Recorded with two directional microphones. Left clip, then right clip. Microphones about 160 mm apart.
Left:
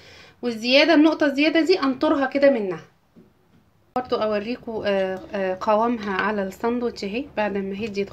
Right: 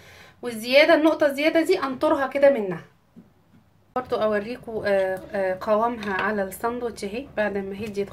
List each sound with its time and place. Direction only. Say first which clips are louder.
0.1 s a woman's voice: left 4 dB; 30° left (ahead or behind)
3.9 s a woman's voice: even; 20° left (ahead or behind)